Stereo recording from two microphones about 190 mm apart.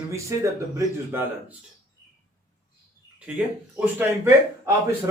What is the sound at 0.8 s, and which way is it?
Speech, 10° right (ahead or behind).